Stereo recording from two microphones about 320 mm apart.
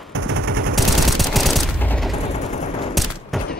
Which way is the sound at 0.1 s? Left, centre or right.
Right.